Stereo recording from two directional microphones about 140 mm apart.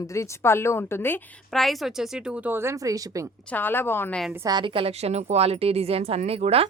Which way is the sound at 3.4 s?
15° left (ahead or behind).